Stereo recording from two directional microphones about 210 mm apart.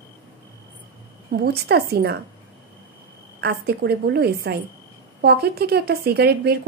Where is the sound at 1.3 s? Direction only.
50° right (ahead or behind).